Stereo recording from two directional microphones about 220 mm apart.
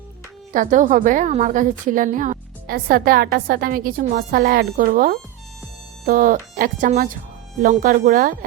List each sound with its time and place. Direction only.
0.5 s a woman's voice: 35° right (ahead or behind)